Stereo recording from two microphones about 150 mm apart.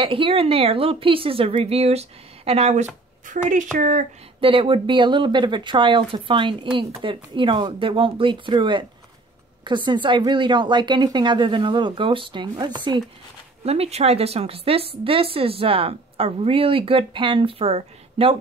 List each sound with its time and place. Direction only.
0.0 s speech: 35° right (ahead or behind)
3.3 s speech: 60° right (ahead or behind)
4.4 s speech: 35° right (ahead or behind)
13.7 s speech: 45° right (ahead or behind)